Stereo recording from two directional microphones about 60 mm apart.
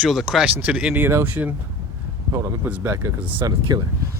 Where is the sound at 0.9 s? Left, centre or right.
Right.